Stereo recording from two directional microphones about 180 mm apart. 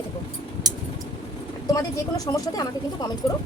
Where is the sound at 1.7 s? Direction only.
20° left (ahead or behind).